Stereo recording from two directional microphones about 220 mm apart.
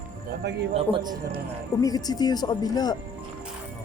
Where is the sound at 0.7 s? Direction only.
20° right (ahead or behind).